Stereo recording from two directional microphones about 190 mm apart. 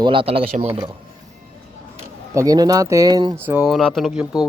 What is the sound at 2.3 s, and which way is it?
Speech, 20° right (ahead or behind).